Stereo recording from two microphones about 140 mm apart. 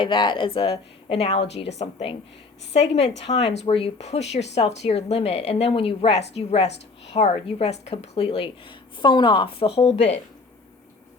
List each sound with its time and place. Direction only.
0.0 s a woman's voice: 35° left (ahead or behind)